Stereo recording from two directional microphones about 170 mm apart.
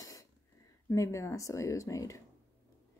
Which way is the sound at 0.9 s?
15° left (ahead or behind).